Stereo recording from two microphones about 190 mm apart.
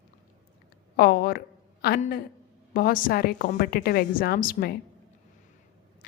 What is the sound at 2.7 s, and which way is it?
A woman's voice, 50° left (ahead or behind).